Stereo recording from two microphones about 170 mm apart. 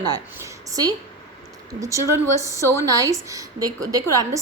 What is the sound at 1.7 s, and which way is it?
A woman's voice, 20° right (ahead or behind).